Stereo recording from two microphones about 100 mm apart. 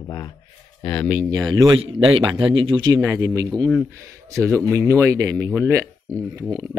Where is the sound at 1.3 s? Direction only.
40° right (ahead or behind).